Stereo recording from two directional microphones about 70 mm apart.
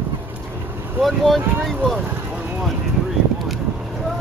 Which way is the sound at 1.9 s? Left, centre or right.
Right.